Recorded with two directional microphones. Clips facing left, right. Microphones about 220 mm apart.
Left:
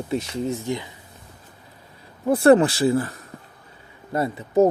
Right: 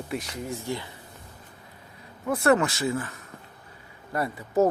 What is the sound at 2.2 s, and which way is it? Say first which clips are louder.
Speech: left 7 dB; 30° left (ahead or behind).